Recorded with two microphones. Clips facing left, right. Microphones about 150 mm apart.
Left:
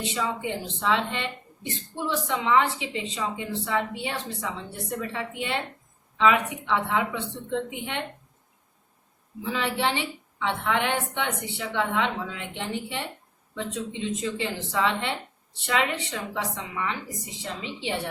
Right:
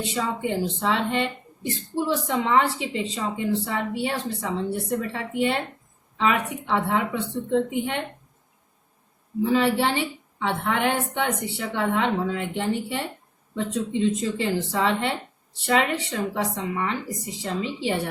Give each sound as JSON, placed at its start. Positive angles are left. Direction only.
{"t": 0.1, "sound": "speech", "side_deg": -40}
{"t": 9.4, "sound": "speech", "side_deg": -40}